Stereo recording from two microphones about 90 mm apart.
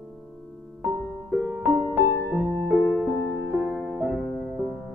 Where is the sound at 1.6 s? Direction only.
25° right (ahead or behind).